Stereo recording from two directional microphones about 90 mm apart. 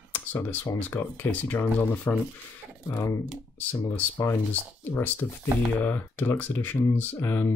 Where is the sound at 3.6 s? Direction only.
20° left (ahead or behind).